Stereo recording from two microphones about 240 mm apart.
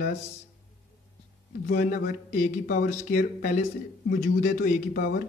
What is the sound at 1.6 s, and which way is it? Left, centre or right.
Speech, left.